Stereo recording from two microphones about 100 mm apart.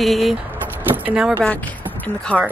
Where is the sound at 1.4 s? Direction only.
15° left (ahead or behind).